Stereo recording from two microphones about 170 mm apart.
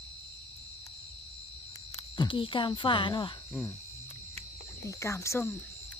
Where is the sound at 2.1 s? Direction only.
25° left (ahead or behind).